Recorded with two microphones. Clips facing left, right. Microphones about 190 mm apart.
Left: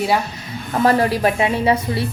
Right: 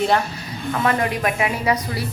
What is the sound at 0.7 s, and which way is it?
A woman's voice, 35° left (ahead or behind).